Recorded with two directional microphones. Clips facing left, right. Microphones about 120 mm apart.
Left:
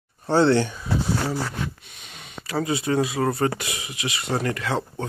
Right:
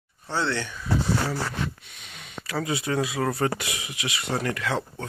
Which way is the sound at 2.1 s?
15° left (ahead or behind).